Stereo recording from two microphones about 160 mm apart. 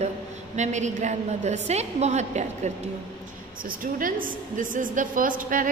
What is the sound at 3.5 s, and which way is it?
A woman's voice, 60° right (ahead or behind).